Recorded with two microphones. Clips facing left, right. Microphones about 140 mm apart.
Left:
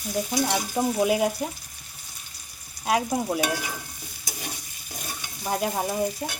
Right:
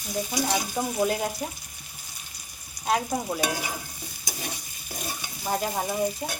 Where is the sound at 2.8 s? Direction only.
5° left (ahead or behind).